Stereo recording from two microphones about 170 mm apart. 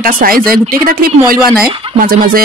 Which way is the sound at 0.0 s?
55° right (ahead or behind).